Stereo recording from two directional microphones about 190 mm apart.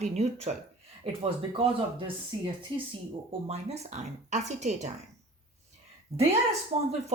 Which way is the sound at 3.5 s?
35° right (ahead or behind).